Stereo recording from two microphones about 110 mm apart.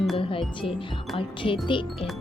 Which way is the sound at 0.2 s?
55° left (ahead or behind).